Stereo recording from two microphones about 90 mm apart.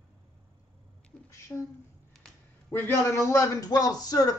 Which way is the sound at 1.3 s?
35° left (ahead or behind).